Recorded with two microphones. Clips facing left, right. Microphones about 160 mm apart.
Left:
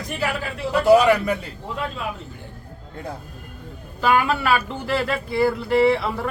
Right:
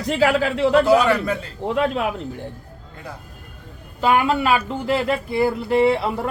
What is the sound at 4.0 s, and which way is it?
Speech, 25° right (ahead or behind).